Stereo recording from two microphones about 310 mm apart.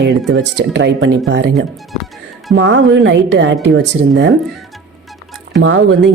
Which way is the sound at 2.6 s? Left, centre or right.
Right.